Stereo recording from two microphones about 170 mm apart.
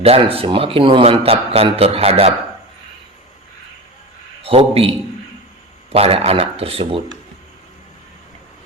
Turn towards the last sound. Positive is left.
turn(degrees=-35)  # may be behind; listen again after turning